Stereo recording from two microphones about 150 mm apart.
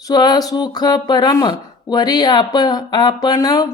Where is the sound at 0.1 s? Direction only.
30° left (ahead or behind).